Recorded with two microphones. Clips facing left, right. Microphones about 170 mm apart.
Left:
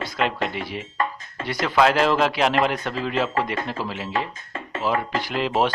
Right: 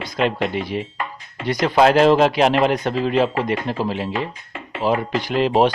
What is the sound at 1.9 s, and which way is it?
Speech, 20° right (ahead or behind).